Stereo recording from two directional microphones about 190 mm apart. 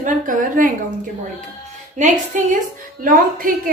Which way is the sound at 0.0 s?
45° right (ahead or behind).